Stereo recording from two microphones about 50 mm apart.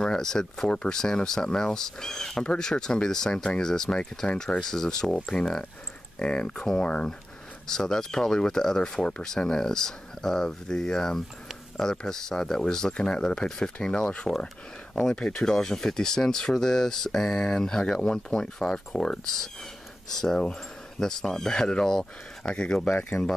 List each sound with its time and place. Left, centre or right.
0.0 s speech: centre
5.1 s speech: left
23.2 s speech: centre